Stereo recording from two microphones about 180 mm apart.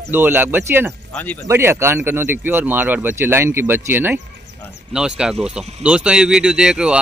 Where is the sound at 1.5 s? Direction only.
15° right (ahead or behind).